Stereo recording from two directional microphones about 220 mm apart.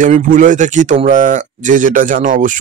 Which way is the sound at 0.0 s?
35° right (ahead or behind).